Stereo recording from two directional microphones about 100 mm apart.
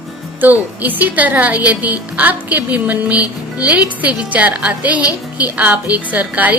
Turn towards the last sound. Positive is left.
turn(degrees=-15)  # may be behind; listen again after turning